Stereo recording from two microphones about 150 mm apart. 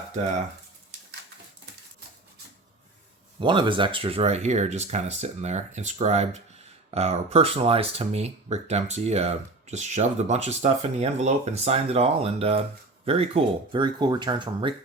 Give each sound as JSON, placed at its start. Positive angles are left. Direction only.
{"t": 3.4, "sound": "speech", "side_deg": -30}